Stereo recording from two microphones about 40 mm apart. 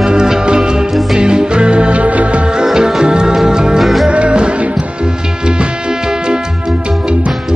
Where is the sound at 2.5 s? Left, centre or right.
Centre.